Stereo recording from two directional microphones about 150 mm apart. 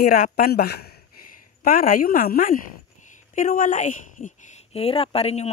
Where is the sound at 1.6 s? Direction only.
75° left (ahead or behind).